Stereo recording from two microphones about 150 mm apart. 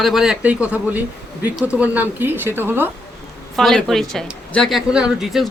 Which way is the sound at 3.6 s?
Centre (ahead or behind).